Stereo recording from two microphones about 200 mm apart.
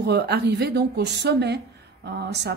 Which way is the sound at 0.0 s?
55° right (ahead or behind).